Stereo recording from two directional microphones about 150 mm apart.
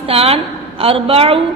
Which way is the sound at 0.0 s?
40° right (ahead or behind).